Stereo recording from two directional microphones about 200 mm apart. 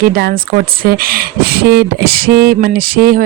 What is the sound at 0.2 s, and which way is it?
Speech, 50° right (ahead or behind).